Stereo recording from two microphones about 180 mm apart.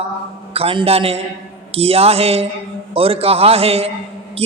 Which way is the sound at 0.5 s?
30° right (ahead or behind).